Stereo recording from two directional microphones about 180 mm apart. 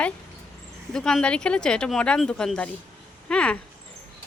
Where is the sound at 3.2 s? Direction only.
5° left (ahead or behind).